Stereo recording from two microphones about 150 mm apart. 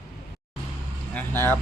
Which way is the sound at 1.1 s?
15° left (ahead or behind).